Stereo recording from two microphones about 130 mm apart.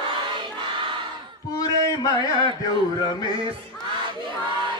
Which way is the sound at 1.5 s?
30° left (ahead or behind).